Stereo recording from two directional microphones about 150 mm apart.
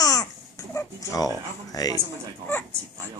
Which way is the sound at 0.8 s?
25° left (ahead or behind).